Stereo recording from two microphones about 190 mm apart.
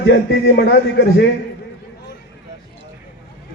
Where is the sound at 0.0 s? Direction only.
70° left (ahead or behind).